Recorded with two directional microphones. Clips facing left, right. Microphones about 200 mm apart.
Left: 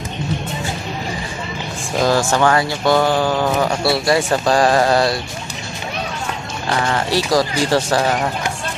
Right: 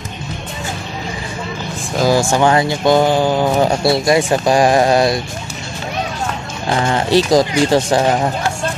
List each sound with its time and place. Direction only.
2.0 s speech: 10° right (ahead or behind)
6.7 s speech: 20° right (ahead or behind)